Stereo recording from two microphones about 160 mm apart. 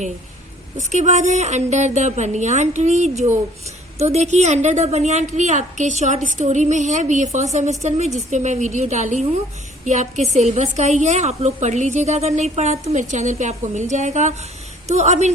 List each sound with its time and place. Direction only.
0.8 s a woman's voice: 50° right (ahead or behind)